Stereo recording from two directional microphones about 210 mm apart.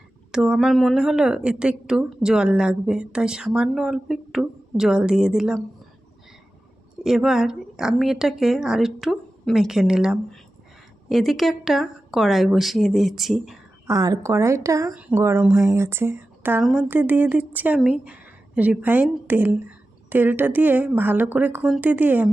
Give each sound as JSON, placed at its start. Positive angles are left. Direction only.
{"t": 0.3, "sound": "a woman's voice", "side_deg": -5}
{"t": 7.0, "sound": "a woman's voice", "side_deg": 0}
{"t": 13.8, "sound": "speech", "side_deg": -15}